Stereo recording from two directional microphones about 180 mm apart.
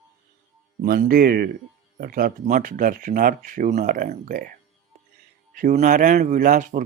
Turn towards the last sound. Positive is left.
turn(degrees=-45)  # may be behind; listen again after turning